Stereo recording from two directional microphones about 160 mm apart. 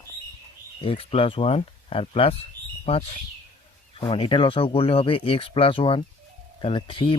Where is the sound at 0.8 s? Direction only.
35° left (ahead or behind).